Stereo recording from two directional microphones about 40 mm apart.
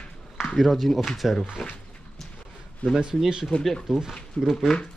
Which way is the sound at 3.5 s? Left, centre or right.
Left.